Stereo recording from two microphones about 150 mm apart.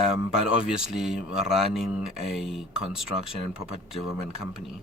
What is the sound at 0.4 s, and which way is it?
Speech, 5° right (ahead or behind).